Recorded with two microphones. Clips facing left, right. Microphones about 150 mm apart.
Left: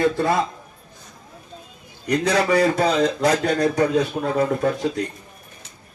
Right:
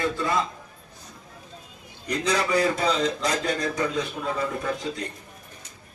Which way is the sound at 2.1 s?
65° left (ahead or behind).